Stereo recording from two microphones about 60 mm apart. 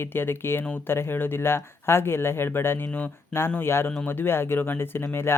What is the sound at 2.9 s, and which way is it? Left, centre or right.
Speech, left.